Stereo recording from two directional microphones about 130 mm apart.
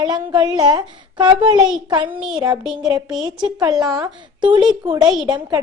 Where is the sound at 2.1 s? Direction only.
10° right (ahead or behind).